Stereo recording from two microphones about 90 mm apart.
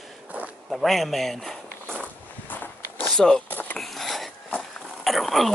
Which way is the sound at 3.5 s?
20° left (ahead or behind).